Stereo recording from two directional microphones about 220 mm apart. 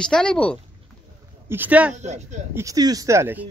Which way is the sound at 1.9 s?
30° right (ahead or behind).